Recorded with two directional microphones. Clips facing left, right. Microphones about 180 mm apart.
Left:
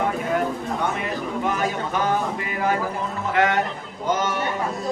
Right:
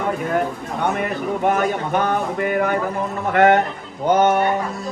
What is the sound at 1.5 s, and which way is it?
Speech, 60° right (ahead or behind).